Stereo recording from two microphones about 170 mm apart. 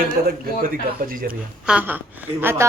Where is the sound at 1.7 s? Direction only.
10° right (ahead or behind).